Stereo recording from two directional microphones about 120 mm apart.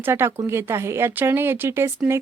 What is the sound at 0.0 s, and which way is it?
Speech, 20° right (ahead or behind).